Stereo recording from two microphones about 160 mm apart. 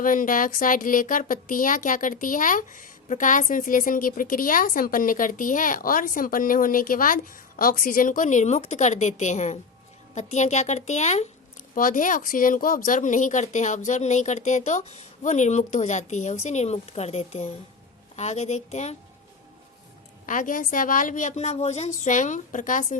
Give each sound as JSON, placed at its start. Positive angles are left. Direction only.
{"t": 0.0, "sound": "a woman's voice", "side_deg": 55}
{"t": 11.7, "sound": "a woman's voice", "side_deg": 55}
{"t": 20.2, "sound": "a woman's voice", "side_deg": 55}